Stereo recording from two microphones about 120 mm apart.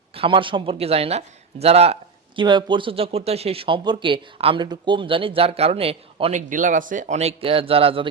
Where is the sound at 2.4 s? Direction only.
40° right (ahead or behind).